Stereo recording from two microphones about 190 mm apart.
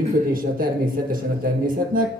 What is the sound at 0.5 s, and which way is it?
Speech, 50° right (ahead or behind).